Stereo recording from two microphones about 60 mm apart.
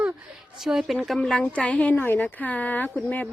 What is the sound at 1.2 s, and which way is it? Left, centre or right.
A woman's voice, centre.